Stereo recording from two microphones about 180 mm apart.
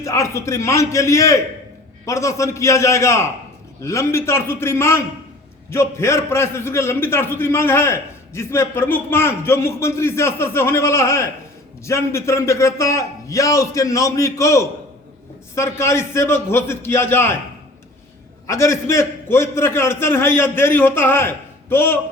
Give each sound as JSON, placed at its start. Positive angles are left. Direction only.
{"t": 0.0, "sound": "a man's voice", "side_deg": 15}
{"t": 18.4, "sound": "a man's voice", "side_deg": 15}